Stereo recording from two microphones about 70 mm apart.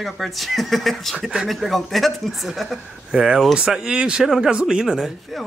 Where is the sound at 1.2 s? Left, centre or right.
Centre.